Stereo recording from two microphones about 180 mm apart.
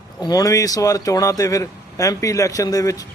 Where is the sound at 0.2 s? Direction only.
20° left (ahead or behind).